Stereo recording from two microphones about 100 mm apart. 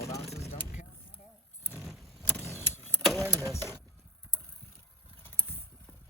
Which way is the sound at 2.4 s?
25° left (ahead or behind).